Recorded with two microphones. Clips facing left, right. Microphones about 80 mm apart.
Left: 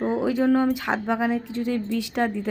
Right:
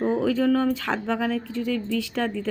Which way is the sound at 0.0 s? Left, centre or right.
Centre.